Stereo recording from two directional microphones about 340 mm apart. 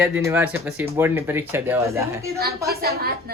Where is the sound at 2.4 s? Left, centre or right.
Right.